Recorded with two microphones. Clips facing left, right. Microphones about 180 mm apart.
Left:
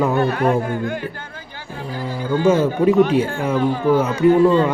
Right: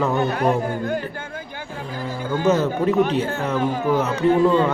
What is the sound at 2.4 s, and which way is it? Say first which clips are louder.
A man's voice: left 4 dB; 10° left (ahead or behind).